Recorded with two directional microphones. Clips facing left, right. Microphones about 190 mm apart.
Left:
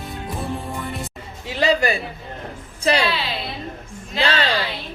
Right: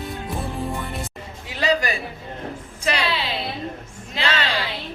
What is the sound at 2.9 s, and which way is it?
Speech, 30° left (ahead or behind).